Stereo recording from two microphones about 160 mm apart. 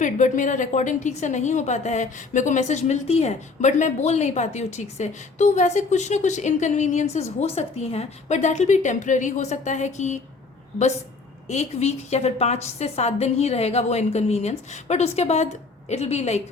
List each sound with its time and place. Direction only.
0.0 s a woman's voice: 50° left (ahead or behind)
11.4 s a woman's voice: 45° left (ahead or behind)